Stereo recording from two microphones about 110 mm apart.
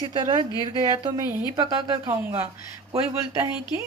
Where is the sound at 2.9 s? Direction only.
25° right (ahead or behind).